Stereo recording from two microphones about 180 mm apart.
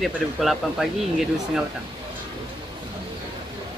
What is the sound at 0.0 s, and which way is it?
Speech, centre (ahead or behind).